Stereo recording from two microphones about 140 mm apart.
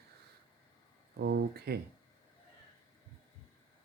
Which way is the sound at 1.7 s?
90° right.